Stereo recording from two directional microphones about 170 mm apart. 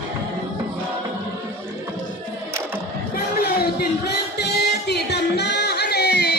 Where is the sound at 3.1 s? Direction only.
65° left (ahead or behind).